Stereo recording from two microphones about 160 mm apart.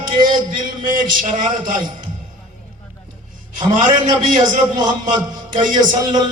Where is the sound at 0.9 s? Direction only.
55° right (ahead or behind).